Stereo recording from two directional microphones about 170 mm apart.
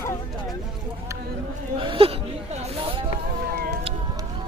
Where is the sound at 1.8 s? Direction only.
30° right (ahead or behind).